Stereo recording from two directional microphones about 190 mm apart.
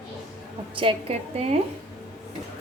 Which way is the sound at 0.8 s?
30° right (ahead or behind).